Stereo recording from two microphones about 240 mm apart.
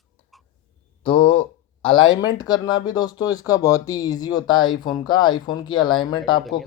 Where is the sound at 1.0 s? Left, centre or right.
Left.